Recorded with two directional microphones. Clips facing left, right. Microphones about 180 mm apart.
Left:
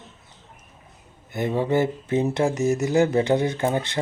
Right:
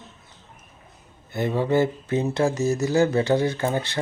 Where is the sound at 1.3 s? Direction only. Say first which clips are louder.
Even; 20° left (ahead or behind).